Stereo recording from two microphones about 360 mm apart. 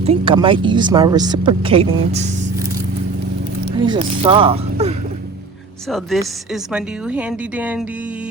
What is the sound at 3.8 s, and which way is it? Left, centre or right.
Speech, centre.